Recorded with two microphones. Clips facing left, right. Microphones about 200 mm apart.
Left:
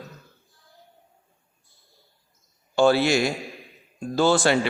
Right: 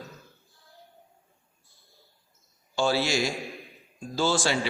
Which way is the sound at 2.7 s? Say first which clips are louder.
Left 7 dB; 60° left (ahead or behind).